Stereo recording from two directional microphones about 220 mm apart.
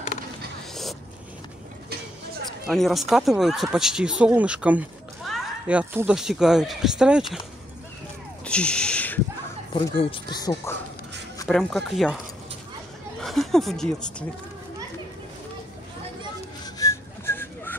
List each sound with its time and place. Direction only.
2.6 s speech: centre (ahead or behind)
8.5 s a sound: 5° left (ahead or behind)
9.8 s speech: 20° left (ahead or behind)
11.4 s speech: centre (ahead or behind)
13.2 s speech: centre (ahead or behind)
16.6 s whistling: 15° left (ahead or behind)